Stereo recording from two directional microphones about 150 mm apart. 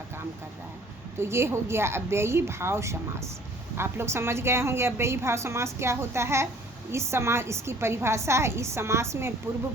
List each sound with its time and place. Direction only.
1.2 s a woman's voice: 15° right (ahead or behind)